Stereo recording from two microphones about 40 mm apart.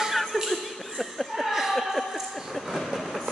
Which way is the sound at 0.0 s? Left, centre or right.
Centre.